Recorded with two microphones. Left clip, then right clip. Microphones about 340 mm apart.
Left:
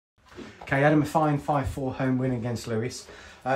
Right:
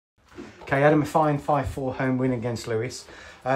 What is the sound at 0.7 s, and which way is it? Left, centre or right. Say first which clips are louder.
Speech: right 2 dB; centre.